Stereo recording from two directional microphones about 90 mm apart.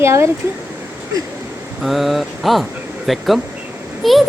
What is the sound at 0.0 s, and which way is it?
Speech, 30° right (ahead or behind).